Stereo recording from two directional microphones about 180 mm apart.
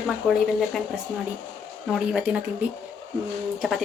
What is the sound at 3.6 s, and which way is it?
Speech, centre (ahead or behind).